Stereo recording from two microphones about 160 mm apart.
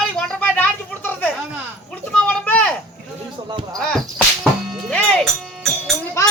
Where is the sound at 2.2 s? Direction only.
10° left (ahead or behind).